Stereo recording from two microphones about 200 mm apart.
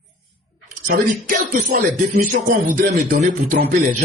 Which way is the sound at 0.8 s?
40° right (ahead or behind).